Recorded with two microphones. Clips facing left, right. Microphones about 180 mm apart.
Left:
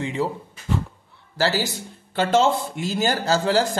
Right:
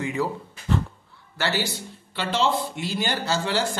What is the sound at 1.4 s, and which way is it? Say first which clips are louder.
A man's voice: left 4 dB; 35° left (ahead or behind).